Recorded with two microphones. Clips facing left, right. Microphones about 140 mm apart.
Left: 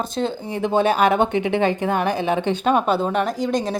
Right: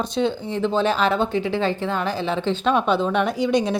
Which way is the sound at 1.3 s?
60° left (ahead or behind).